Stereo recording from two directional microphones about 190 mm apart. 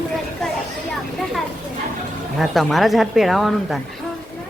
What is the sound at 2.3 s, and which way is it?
Speech, centre (ahead or behind).